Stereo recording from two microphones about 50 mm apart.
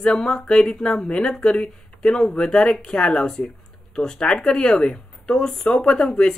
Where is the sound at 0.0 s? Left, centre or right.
Centre.